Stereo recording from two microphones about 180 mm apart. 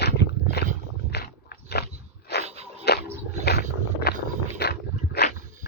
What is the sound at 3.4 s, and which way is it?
Vehicle, 65° left (ahead or behind).